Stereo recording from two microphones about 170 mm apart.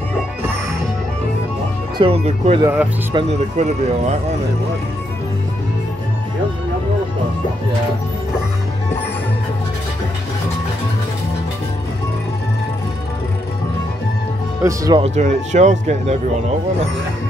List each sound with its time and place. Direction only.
2.0 s speech: 35° right (ahead or behind)
2.6 s speech: 10° right (ahead or behind)
3.2 s speech: 40° right (ahead or behind)
14.6 s speech: 20° right (ahead or behind)
15.0 s speech: 40° right (ahead or behind)